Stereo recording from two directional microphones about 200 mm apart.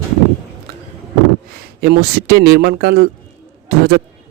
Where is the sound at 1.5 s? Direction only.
55° right (ahead or behind).